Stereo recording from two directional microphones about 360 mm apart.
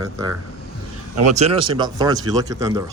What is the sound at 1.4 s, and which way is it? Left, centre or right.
Speech, centre.